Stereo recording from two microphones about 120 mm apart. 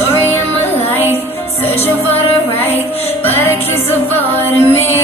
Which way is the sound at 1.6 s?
15° left (ahead or behind).